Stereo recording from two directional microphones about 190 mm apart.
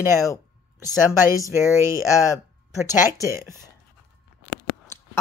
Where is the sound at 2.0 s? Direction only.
15° left (ahead or behind).